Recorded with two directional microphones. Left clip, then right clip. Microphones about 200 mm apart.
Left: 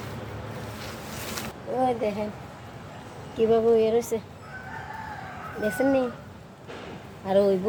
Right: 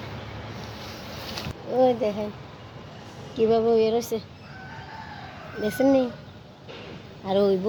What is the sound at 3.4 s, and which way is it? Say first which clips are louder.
Speech: even; 40° right (ahead or behind).